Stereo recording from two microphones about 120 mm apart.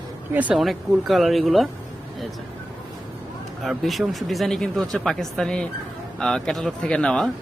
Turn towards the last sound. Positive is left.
turn(degrees=5)  # may be behind; listen again after turning